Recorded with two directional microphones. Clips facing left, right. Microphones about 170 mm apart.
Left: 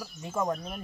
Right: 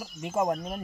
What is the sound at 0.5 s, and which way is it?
Speech, 40° right (ahead or behind).